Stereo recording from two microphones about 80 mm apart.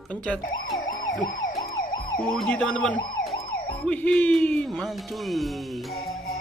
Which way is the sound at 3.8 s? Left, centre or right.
Centre.